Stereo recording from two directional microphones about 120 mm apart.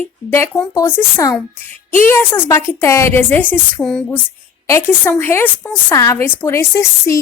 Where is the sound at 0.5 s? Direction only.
25° left (ahead or behind).